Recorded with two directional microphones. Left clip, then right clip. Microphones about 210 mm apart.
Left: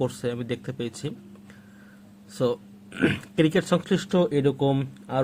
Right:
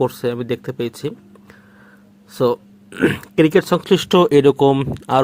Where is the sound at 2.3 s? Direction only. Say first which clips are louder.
Right 8 dB; 20° right (ahead or behind).